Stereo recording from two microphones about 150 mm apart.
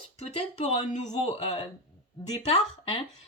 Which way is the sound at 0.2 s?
45° left (ahead or behind).